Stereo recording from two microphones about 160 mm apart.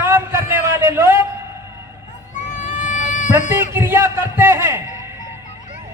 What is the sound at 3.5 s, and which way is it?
Speech, 15° right (ahead or behind).